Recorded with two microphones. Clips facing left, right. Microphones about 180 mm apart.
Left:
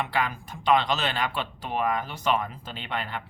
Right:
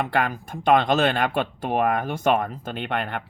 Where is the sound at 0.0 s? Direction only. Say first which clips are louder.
Right 4 dB; 50° right (ahead or behind).